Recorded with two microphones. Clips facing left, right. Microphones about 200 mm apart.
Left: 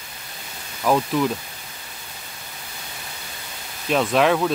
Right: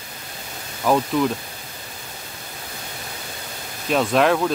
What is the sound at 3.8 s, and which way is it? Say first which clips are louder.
Speech: right 1 dB; centre (ahead or behind).